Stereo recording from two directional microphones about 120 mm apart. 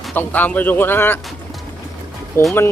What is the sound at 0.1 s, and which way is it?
Speech, 15° left (ahead or behind).